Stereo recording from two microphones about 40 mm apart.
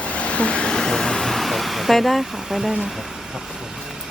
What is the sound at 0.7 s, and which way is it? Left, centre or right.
Speech, centre.